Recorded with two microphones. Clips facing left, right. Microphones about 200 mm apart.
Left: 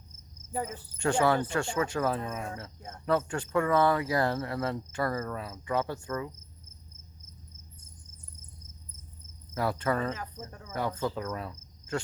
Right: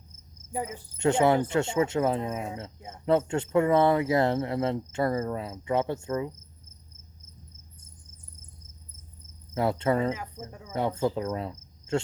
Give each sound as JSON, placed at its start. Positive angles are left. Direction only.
{"t": 0.5, "sound": "cricket", "side_deg": -10}
{"t": 0.9, "sound": "speech", "side_deg": -20}
{"t": 9.6, "sound": "speech", "side_deg": -25}
{"t": 10.1, "sound": "cricket", "side_deg": -10}
{"t": 10.7, "sound": "speech", "side_deg": -25}